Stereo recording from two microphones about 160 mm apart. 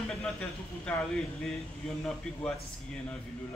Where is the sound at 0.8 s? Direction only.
Centre (ahead or behind).